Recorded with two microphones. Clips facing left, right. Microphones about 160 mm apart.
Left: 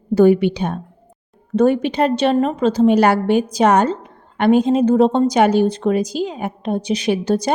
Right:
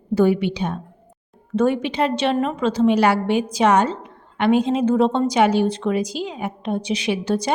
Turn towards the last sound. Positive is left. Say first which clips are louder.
# left 4 dB
turn(degrees=40)  # may be behind; listen again after turning